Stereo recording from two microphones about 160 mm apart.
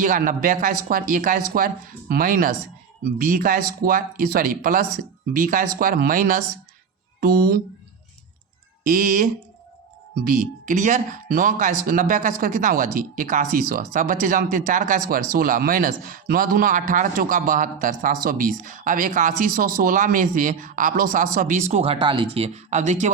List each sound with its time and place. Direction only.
0.0 s speech: 55° right (ahead or behind)
7.2 s speech: 70° right (ahead or behind)
8.9 s speech: 60° right (ahead or behind)